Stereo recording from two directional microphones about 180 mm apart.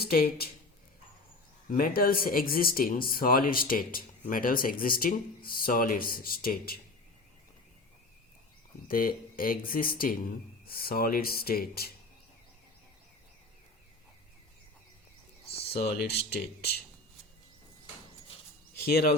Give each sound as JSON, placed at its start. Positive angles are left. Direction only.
{"t": 0.0, "sound": "speech", "side_deg": 60}
{"t": 1.7, "sound": "speech", "side_deg": 55}
{"t": 8.9, "sound": "speech", "side_deg": 55}
{"t": 16.1, "sound": "speech", "side_deg": 60}
{"t": 18.9, "sound": "speech", "side_deg": 55}